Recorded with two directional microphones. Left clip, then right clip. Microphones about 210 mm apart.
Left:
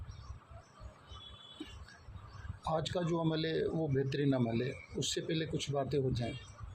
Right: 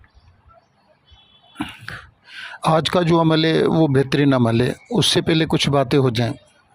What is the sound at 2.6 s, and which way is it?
Speech, 50° right (ahead or behind).